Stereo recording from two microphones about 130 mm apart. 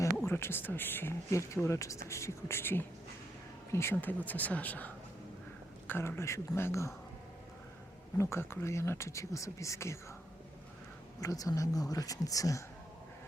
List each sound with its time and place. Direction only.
0.2 s speech: 20° left (ahead or behind)
5.9 s speech: 20° left (ahead or behind)
8.2 s speech: 20° left (ahead or behind)
11.2 s speech: 25° left (ahead or behind)